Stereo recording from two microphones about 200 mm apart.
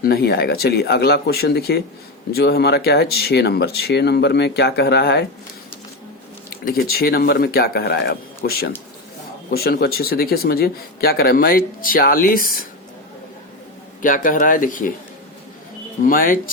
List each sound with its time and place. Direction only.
0.0 s a man's voice: 50° left (ahead or behind)
6.7 s a man's voice: 50° left (ahead or behind)
14.0 s a man's voice: 40° left (ahead or behind)
16.0 s a man's voice: 45° left (ahead or behind)